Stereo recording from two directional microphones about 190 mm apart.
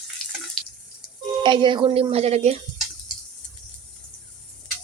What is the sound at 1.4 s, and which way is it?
A woman's voice, 25° right (ahead or behind).